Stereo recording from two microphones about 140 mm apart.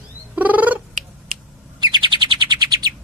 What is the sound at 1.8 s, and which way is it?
Bird, 35° right (ahead or behind).